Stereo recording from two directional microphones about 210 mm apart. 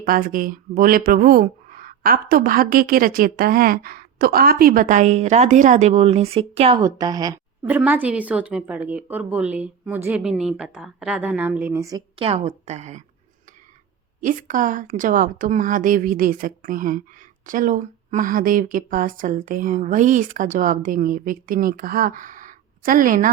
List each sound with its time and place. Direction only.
0.0 s speech: 45° right (ahead or behind); by 7.3 s 20° right (ahead or behind)
7.6 s speech: 5° right (ahead or behind)
12.3 s speech: 30° right (ahead or behind)
14.2 s speech: 40° right (ahead or behind)